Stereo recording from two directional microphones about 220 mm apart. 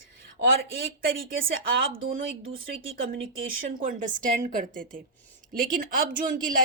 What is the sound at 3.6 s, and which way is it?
Speech, 35° right (ahead or behind).